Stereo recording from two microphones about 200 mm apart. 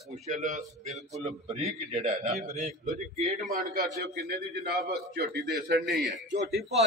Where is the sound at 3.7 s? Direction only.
50° right (ahead or behind).